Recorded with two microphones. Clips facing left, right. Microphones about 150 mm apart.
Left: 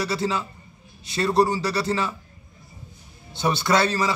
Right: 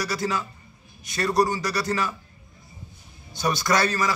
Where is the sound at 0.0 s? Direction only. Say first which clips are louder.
Left 2 dB; 25° left (ahead or behind).